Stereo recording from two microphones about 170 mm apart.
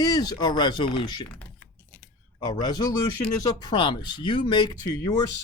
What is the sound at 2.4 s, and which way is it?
Speech, 25° left (ahead or behind).